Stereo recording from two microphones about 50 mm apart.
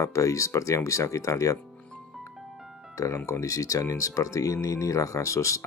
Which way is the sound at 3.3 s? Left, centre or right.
Left.